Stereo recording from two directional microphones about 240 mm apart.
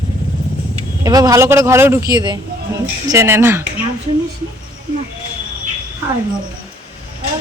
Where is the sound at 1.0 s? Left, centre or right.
Centre.